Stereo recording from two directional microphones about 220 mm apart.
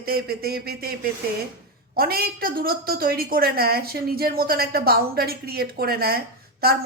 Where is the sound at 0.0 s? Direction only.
45° right (ahead or behind).